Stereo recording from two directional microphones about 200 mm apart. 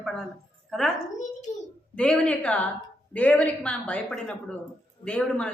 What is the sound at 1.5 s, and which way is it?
Speech, 35° left (ahead or behind).